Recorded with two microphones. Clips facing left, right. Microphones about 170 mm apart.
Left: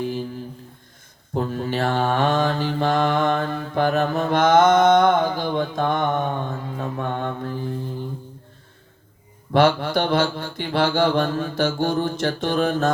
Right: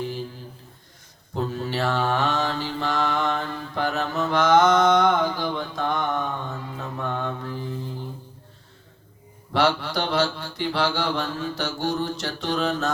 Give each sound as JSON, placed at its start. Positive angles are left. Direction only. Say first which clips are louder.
{"t": 1.3, "sound": "mantra", "louder": "left 3 dB", "side_deg": 50}
{"t": 9.5, "sound": "mantra", "louder": "left 5 dB", "side_deg": 50}